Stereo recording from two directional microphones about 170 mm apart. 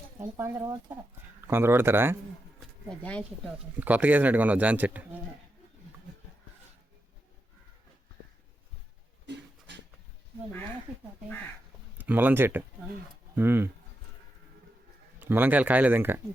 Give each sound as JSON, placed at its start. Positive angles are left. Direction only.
{"t": 0.2, "sound": "speech", "side_deg": -15}
{"t": 2.9, "sound": "speech", "side_deg": 5}
{"t": 3.8, "sound": "speech", "side_deg": -10}
{"t": 9.2, "sound": "a sound", "side_deg": -90}
{"t": 11.9, "sound": "speech", "side_deg": -10}
{"t": 15.2, "sound": "speech", "side_deg": -10}